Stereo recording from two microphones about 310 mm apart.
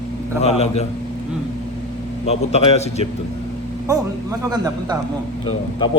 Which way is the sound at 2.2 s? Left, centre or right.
Centre.